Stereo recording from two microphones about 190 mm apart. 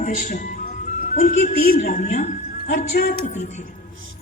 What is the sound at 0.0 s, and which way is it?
A woman's voice, 45° left (ahead or behind).